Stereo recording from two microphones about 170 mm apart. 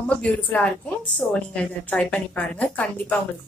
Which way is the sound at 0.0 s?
5° left (ahead or behind).